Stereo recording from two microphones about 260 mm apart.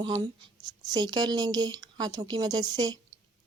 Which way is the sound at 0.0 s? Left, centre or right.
Centre.